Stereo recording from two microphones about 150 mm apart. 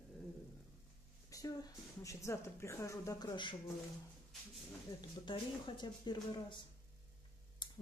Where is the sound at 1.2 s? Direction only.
20° left (ahead or behind).